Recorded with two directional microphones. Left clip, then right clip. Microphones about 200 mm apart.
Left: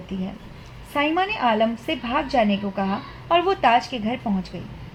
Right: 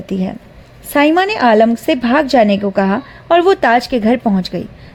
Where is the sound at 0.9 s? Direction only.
50° right (ahead or behind).